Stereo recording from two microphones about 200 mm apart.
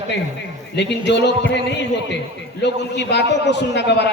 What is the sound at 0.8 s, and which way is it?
Speech, 60° left (ahead or behind).